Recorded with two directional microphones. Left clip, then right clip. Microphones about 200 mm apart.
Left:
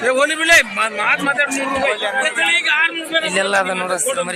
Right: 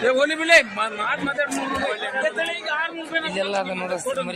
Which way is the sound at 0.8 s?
10° left (ahead or behind).